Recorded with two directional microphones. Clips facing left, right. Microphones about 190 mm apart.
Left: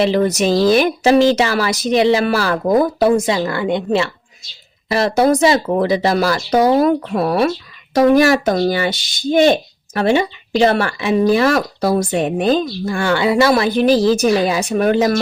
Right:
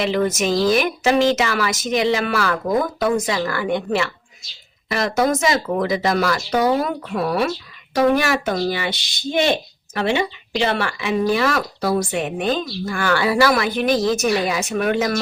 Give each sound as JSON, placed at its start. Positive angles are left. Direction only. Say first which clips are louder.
{"t": 0.0, "sound": "speech", "louder": "left 5 dB", "side_deg": 35}